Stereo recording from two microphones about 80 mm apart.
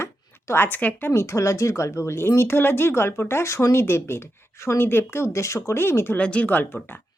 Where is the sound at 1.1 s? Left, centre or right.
Left.